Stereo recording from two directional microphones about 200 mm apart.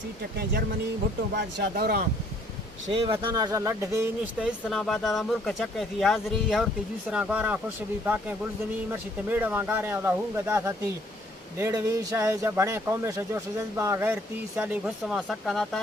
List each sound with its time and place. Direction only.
1.4 s speech: 50° right (ahead or behind)
2.9 s speech: 25° right (ahead or behind); by 7.6 s 5° right (ahead or behind)
8.9 s speech: 10° right (ahead or behind)